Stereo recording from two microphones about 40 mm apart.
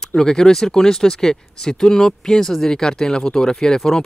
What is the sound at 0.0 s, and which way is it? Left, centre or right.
Speech, centre.